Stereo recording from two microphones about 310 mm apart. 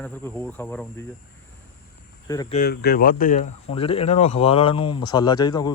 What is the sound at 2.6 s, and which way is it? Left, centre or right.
Speech, left.